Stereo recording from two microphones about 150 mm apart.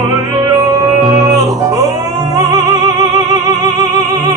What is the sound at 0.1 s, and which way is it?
Music, 20° right (ahead or behind).